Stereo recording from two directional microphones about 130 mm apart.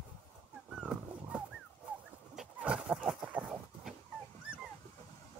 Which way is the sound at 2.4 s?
10° right (ahead or behind).